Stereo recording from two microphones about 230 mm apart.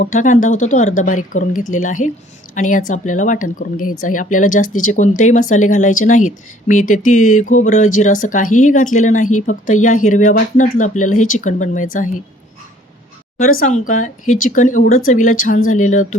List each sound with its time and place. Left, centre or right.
0.0 s speech: left
13.5 s speech: left